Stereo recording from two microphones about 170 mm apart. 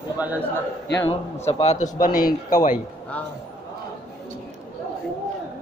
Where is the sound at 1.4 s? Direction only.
40° left (ahead or behind).